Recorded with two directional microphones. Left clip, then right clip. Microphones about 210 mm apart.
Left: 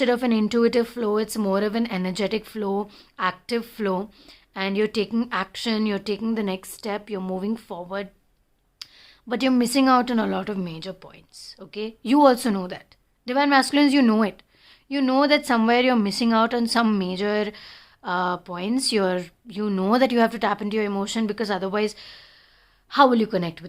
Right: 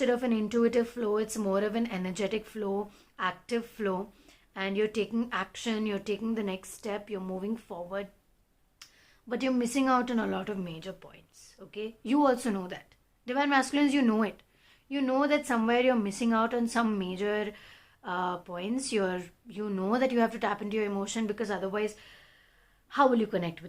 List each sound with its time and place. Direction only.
0.0 s speech: 40° left (ahead or behind)
9.3 s speech: 40° left (ahead or behind)